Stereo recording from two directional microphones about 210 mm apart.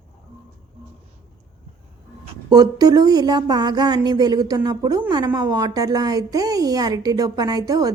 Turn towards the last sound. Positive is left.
turn(degrees=-15)  # may be behind; listen again after turning